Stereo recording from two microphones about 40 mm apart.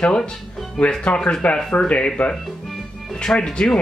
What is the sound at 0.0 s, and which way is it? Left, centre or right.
Speech, centre.